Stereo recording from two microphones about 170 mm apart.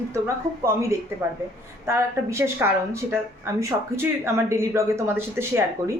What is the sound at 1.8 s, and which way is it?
Speech, 15° right (ahead or behind).